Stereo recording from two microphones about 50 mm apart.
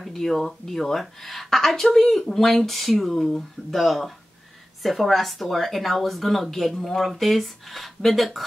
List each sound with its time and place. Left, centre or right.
0.0 s speech: centre